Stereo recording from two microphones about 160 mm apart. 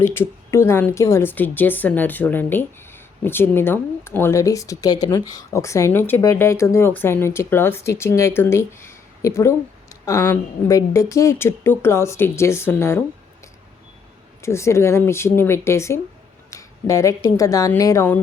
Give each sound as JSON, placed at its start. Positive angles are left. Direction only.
{"t": 0.0, "sound": "a woman's voice", "side_deg": 15}
{"t": 14.4, "sound": "a woman's voice", "side_deg": 15}